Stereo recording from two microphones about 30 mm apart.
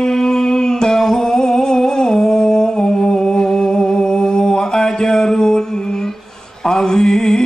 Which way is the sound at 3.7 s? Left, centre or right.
Left.